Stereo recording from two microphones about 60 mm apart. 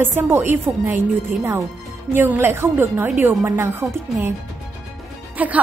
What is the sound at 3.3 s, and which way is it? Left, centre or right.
Speech, right.